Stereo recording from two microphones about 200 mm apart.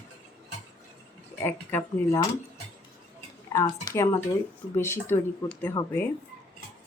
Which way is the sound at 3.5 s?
15° left (ahead or behind).